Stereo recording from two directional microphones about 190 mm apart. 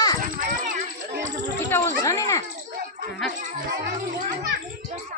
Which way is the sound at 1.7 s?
15° left (ahead or behind).